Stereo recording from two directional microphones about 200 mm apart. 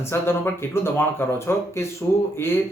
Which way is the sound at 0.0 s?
10° left (ahead or behind).